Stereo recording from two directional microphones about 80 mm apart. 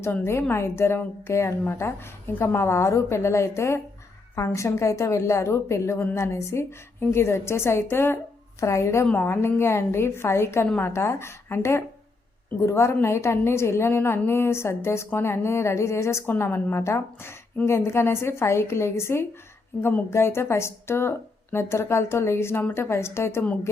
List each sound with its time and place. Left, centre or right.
0.0 s a woman's voice: left